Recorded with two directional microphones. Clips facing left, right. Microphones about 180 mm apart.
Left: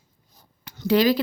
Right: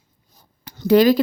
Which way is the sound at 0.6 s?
40° right (ahead or behind).